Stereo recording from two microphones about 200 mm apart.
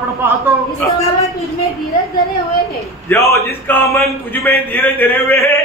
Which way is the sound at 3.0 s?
15° left (ahead or behind).